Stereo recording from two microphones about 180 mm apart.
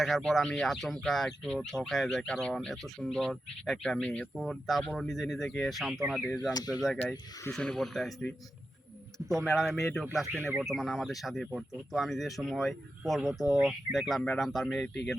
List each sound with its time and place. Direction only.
0.0 s speech: centre (ahead or behind)
6.5 s speech: 20° left (ahead or behind)
6.8 s speech: centre (ahead or behind)
10.3 s speech: 10° right (ahead or behind)
10.7 s speech: centre (ahead or behind)